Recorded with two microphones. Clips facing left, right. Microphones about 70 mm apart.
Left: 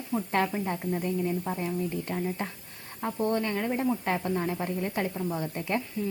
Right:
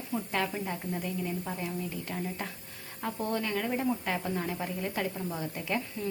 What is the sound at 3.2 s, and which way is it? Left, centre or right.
A woman's voice, left.